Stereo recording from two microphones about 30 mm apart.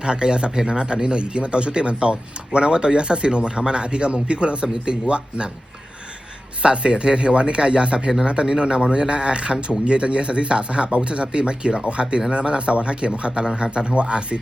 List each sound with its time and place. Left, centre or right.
0.0 s speech: right
6.6 s speech: right
13.7 s speech: right